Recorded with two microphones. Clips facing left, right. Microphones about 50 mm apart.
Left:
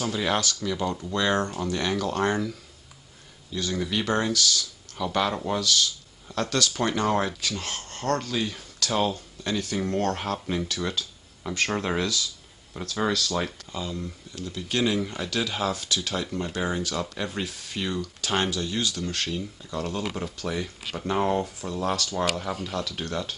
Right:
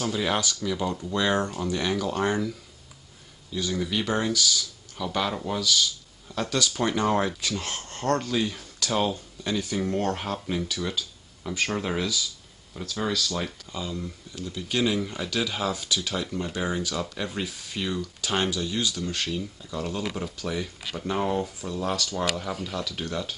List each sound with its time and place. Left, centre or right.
0.0 s speech: centre
3.5 s speech: centre
7.4 s speech: centre
8.3 s speech: centre